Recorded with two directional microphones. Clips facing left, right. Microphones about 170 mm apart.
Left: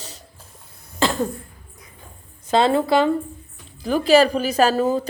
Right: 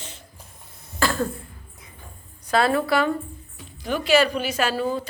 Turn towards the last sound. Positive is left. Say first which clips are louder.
# left 6 dB
turn(degrees=40)  # may be behind; listen again after turning